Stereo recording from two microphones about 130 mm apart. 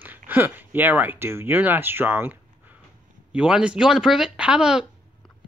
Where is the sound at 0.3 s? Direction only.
15° right (ahead or behind).